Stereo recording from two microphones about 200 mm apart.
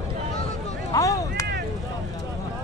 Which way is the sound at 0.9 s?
15° left (ahead or behind).